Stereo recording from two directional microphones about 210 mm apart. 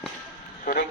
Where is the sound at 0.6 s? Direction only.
40° left (ahead or behind).